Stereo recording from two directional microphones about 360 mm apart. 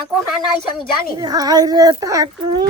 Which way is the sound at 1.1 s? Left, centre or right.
Centre.